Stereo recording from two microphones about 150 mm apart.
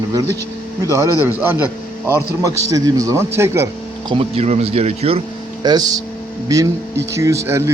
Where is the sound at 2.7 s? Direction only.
25° right (ahead or behind).